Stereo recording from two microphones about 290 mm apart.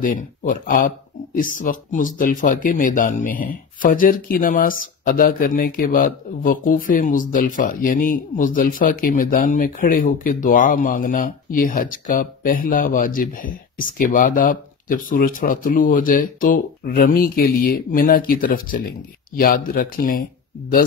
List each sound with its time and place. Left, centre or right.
0.0 s speech: left